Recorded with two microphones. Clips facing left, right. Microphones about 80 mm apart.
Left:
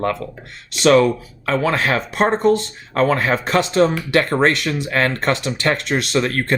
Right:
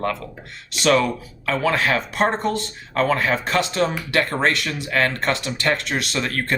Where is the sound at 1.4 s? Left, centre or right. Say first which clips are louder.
Left 2 dB; left.